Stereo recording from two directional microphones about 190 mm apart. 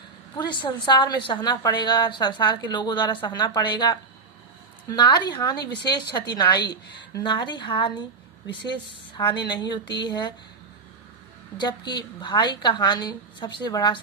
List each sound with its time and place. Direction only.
0.3 s a woman's voice: 25° left (ahead or behind)
9.1 s a woman's voice: 25° left (ahead or behind)
11.5 s a woman's voice: 25° left (ahead or behind)